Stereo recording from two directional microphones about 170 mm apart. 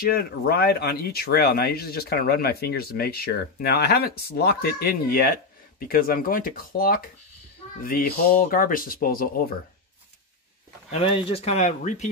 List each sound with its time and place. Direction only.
0.0 s speech: 60° left (ahead or behind)
10.9 s speech: 35° left (ahead or behind)